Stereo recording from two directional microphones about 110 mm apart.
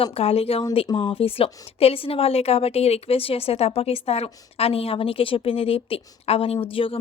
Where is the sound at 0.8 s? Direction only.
50° left (ahead or behind).